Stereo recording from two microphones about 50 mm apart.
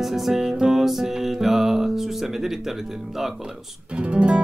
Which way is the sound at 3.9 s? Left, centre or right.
Right.